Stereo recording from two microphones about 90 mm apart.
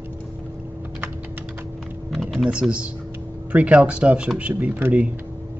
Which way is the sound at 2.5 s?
15° right (ahead or behind).